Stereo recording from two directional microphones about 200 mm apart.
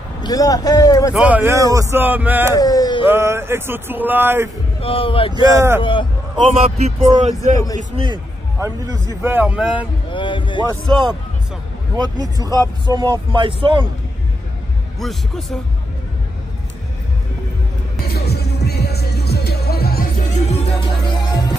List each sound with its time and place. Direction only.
0.2 s a man's voice: 20° left (ahead or behind)
1.1 s a man's voice: 5° right (ahead or behind)
2.5 s speech: 20° left (ahead or behind)
3.1 s a man's voice: 10° right (ahead or behind)
4.8 s a man's voice: 25° left (ahead or behind)
5.5 s a man's voice: 15° right (ahead or behind)
5.8 s a man's voice: 25° left (ahead or behind)
6.3 s a man's voice: 30° right (ahead or behind); by 9.8 s 5° right (ahead or behind)
10.1 s a man's voice: 25° left (ahead or behind)
10.6 s speech: 20° right (ahead or behind)
15.0 s speech: centre (ahead or behind)
18.0 s music: 50° left (ahead or behind)
20.2 s music: 35° left (ahead or behind)